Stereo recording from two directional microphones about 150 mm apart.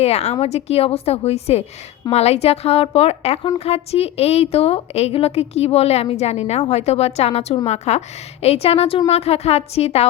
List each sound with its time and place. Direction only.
0.0 s a woman's voice: 45° left (ahead or behind)